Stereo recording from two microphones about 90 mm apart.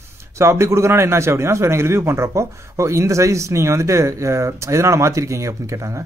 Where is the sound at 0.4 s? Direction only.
30° right (ahead or behind).